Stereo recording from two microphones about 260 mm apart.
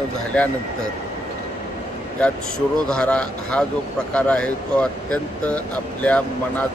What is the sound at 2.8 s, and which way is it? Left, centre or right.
Speech, centre.